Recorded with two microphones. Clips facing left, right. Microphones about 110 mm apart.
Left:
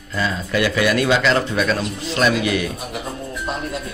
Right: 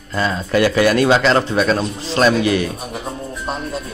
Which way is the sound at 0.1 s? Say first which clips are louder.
Right 4 dB; 40° right (ahead or behind).